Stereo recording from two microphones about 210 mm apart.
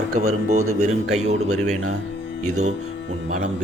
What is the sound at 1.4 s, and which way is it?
Speech, 90° right.